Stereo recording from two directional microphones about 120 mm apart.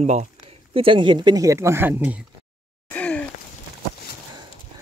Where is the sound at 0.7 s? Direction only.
45° right (ahead or behind); by 2.0 s 20° right (ahead or behind).